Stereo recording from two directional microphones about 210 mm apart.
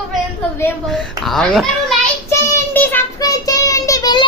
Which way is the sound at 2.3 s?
10° left (ahead or behind).